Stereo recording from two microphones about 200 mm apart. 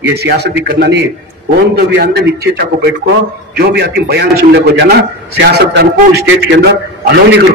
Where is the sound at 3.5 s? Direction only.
55° right (ahead or behind).